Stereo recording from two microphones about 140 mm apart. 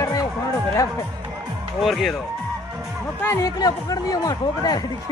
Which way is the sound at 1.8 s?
Centre (ahead or behind).